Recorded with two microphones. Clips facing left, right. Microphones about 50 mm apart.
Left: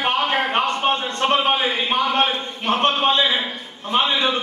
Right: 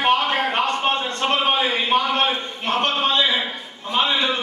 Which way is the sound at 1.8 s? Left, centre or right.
Left.